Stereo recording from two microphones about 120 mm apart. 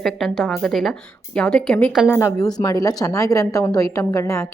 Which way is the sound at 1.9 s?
10° right (ahead or behind).